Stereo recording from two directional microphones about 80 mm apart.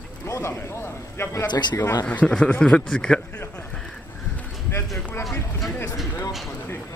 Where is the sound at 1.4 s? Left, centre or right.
Left.